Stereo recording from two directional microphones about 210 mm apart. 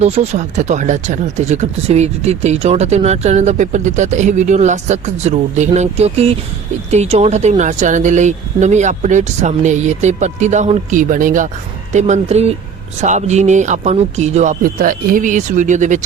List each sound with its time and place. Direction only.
0.0 s speech: 30° right (ahead or behind)